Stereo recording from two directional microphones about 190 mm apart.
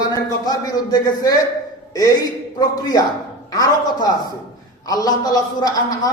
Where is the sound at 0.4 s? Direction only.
20° left (ahead or behind).